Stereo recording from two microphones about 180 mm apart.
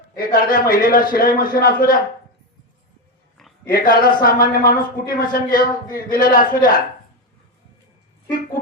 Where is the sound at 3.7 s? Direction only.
55° left (ahead or behind).